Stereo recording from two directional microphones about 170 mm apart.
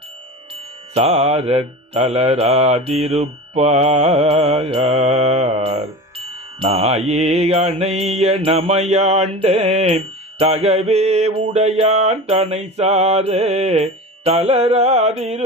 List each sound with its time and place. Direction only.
0.9 s mantra: 40° right (ahead or behind)